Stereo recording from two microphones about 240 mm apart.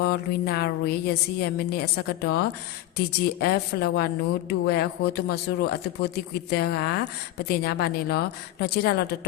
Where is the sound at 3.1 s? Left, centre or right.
Left.